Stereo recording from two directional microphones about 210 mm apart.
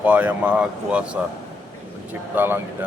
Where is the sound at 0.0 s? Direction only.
5° right (ahead or behind).